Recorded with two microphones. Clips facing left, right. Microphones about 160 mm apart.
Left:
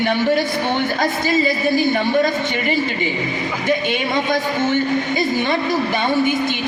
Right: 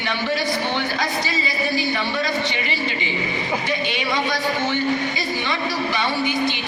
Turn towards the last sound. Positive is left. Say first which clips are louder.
# left 4 dB
turn(degrees=50)  # may be behind; listen again after turning